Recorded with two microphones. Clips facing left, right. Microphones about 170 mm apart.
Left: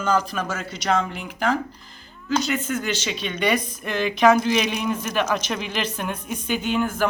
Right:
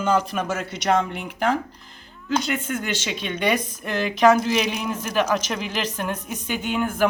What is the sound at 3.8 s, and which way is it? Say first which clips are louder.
A woman's voice: right 1 dB; 5° right (ahead or behind).